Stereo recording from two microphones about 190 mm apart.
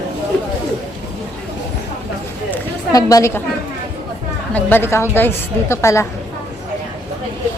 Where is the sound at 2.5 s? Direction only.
15° left (ahead or behind).